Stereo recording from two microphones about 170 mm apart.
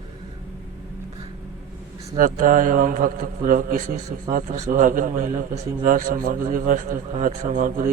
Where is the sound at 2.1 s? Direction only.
50° right (ahead or behind).